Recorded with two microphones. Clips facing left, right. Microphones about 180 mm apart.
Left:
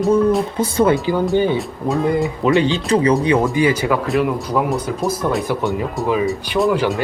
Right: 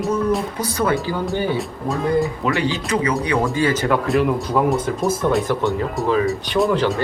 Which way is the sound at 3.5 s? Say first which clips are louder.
Left 3 dB; 15° left (ahead or behind).